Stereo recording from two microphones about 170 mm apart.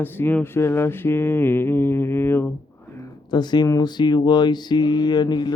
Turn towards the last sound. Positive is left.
turn(degrees=25)  # may be behind; listen again after turning